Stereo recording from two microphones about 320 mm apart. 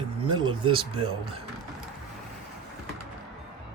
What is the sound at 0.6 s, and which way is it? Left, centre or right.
Speech, centre.